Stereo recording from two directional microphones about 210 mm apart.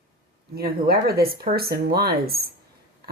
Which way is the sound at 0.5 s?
45° right (ahead or behind).